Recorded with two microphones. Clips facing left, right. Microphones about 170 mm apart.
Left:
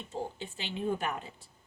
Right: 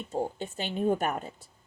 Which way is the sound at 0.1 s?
45° right (ahead or behind).